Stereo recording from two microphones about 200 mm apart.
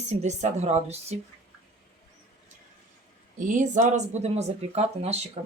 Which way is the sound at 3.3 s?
40° right (ahead or behind).